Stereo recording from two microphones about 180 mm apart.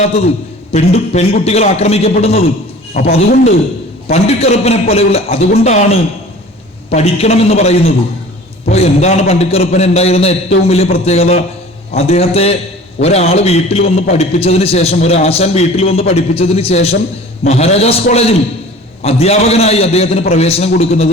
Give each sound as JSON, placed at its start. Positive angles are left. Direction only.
{"t": 0.7, "sound": "a man's voice", "side_deg": 35}
{"t": 3.0, "sound": "speech", "side_deg": 50}
{"t": 4.1, "sound": "a man's voice", "side_deg": 35}